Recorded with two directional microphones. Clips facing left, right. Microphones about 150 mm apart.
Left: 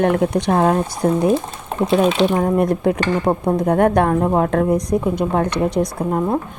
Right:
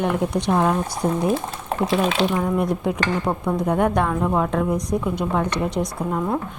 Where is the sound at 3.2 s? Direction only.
40° left (ahead or behind).